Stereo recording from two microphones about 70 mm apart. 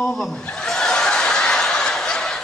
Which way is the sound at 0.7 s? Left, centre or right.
Centre.